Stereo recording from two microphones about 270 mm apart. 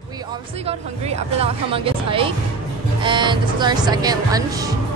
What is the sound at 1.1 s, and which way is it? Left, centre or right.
A woman's voice, right.